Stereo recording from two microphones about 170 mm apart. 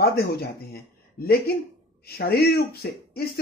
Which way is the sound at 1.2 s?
65° left (ahead or behind).